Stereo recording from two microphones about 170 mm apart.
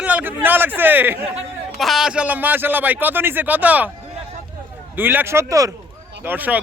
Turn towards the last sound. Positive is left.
turn(degrees=-10)  # may be behind; listen again after turning